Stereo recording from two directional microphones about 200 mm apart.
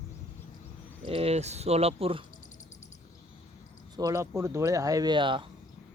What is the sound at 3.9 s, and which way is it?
Speech, 15° right (ahead or behind).